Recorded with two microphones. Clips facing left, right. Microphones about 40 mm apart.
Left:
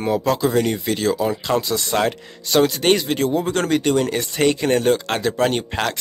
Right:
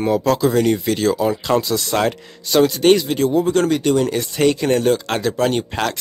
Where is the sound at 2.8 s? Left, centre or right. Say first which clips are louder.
Right 3 dB; left.